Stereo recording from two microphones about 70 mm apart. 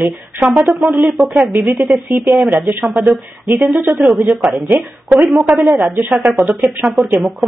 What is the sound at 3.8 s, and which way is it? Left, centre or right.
Speech, right.